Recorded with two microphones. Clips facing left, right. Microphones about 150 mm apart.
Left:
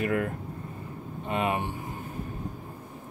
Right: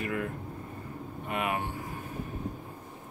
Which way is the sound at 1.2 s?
25° left (ahead or behind).